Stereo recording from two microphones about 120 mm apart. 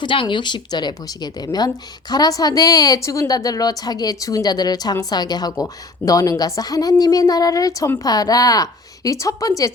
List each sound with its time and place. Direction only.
0.0 s a woman's voice: 40° left (ahead or behind)